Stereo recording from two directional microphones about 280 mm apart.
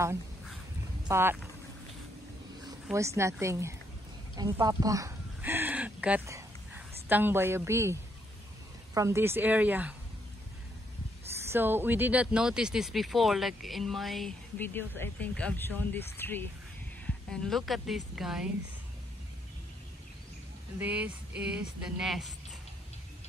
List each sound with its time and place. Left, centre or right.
0.0 s a sound: centre
1.0 s speech: centre
2.9 s speech: centre
11.4 s speech: centre
20.8 s speech: centre